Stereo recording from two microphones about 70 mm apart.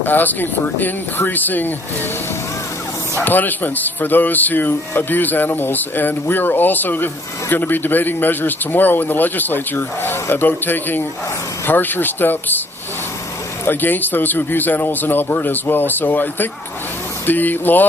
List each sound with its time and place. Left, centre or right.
0.0 s speech: left
3.2 s speech: left
13.7 s speech: left